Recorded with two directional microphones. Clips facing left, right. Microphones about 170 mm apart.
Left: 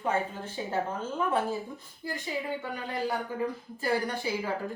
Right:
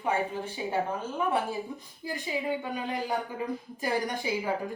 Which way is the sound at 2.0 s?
15° right (ahead or behind).